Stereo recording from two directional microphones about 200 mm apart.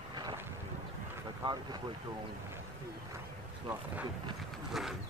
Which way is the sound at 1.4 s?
25° right (ahead or behind).